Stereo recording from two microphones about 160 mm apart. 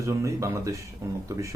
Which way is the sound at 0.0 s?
20° right (ahead or behind).